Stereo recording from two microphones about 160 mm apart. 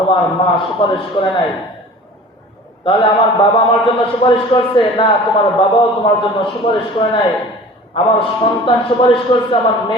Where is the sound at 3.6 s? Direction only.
35° left (ahead or behind).